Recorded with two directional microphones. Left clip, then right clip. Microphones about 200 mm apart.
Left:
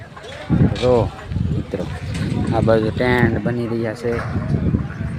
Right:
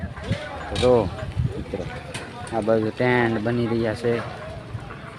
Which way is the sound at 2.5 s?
20° left (ahead or behind).